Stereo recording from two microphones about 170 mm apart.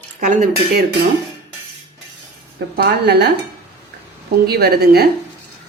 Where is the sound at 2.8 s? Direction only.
75° right (ahead or behind).